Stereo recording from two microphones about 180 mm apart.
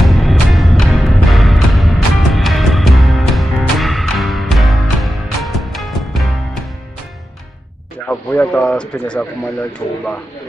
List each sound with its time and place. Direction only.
0.0 s music: centre (ahead or behind)
8.1 s speech: 10° left (ahead or behind)